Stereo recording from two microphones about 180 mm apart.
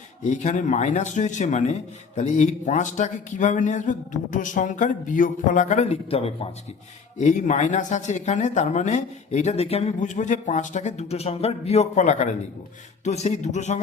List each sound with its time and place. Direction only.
0.2 s speech: 40° left (ahead or behind)